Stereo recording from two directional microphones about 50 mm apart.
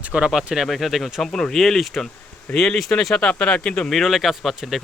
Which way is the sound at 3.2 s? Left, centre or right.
Centre.